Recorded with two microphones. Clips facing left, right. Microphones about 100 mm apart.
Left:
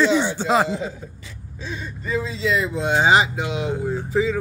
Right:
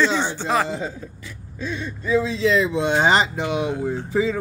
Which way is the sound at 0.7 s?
30° right (ahead or behind).